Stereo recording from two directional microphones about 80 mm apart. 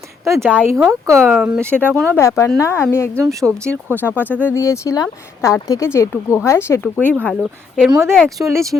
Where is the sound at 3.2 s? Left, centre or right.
Right.